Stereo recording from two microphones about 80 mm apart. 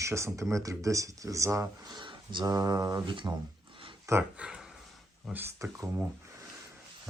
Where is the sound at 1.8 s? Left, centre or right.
Right.